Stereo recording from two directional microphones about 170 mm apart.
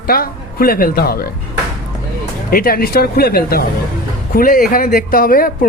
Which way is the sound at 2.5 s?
60° left (ahead or behind).